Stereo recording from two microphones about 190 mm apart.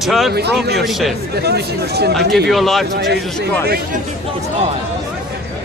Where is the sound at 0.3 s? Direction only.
60° right (ahead or behind).